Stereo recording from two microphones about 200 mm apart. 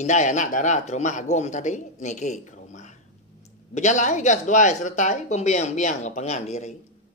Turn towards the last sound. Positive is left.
turn(degrees=35)  # may be behind; listen again after turning